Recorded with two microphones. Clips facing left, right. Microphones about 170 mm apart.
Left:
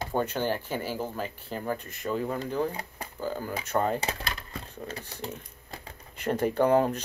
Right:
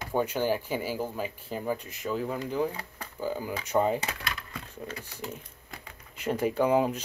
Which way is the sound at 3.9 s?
30° left (ahead or behind).